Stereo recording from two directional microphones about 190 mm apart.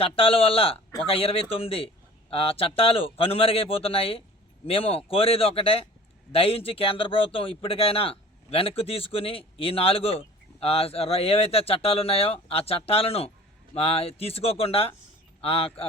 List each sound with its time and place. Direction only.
0.0 s a man's voice: 30° left (ahead or behind)